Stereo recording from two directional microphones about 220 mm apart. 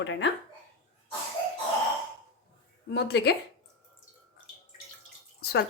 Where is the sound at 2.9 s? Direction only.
50° left (ahead or behind).